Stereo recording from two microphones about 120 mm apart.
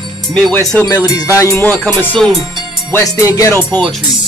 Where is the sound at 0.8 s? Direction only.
25° left (ahead or behind).